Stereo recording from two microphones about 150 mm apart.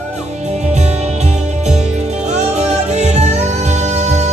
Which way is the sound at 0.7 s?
50° right (ahead or behind).